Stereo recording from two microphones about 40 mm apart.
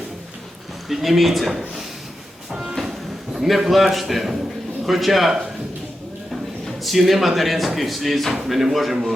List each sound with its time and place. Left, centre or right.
0.9 s speech: centre
2.5 s train: centre
3.3 s speech: centre
6.7 s speech: centre